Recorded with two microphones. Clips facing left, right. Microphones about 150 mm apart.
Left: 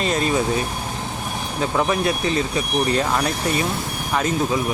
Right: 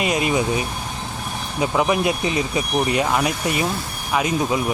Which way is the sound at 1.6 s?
10° right (ahead or behind).